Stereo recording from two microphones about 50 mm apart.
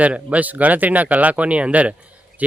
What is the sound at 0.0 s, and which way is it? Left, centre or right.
Speech, right.